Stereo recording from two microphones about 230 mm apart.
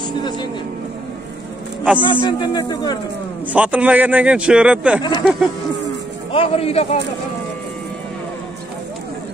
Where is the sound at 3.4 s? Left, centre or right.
Centre.